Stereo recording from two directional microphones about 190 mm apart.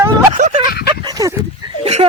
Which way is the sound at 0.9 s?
20° right (ahead or behind).